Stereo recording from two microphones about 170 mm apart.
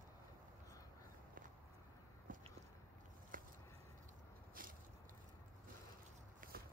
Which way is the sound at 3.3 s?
55° right (ahead or behind).